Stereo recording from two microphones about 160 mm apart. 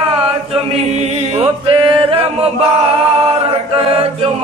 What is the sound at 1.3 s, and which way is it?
Music, 35° right (ahead or behind).